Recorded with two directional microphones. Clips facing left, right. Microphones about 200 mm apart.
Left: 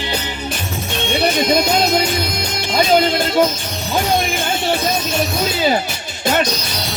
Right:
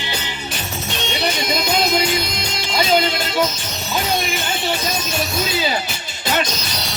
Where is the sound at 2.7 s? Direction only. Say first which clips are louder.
Left 4 dB; 50° left (ahead or behind).